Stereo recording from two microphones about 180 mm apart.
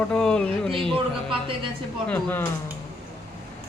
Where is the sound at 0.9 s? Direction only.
30° right (ahead or behind).